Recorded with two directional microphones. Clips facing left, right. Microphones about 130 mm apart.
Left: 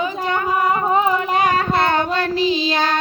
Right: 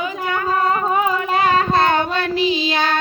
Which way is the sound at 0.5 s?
15° left (ahead or behind).